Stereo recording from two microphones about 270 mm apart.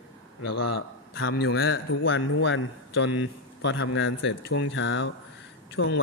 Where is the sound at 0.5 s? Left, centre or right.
Left.